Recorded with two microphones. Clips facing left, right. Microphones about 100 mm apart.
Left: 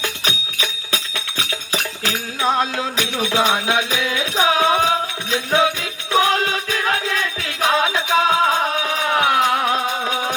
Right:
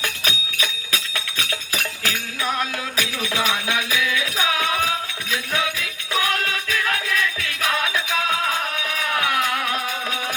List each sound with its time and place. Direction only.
0.0 s music: 30° left (ahead or behind)